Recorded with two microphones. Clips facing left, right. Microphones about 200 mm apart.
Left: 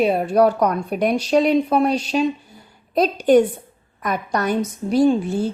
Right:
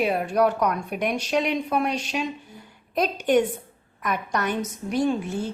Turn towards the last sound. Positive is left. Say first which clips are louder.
# left 7 dB
turn(degrees=35)  # may be behind; listen again after turning